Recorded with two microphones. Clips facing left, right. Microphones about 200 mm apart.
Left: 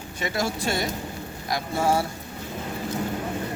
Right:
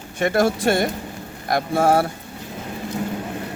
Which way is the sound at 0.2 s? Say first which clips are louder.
Right 9 dB; 55° right (ahead or behind).